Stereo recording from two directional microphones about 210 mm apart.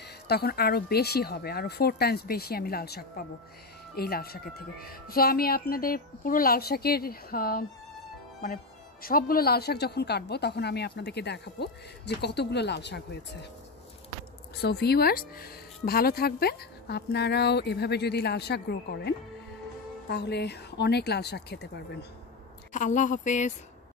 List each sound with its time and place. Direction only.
0.3 s speech: 50° left (ahead or behind)
9.0 s speech: 45° left (ahead or behind)
14.6 s speech: 50° left (ahead or behind)
22.7 s speech: 35° left (ahead or behind)